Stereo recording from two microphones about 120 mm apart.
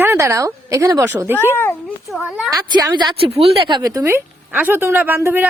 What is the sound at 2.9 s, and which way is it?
Speech, 40° right (ahead or behind).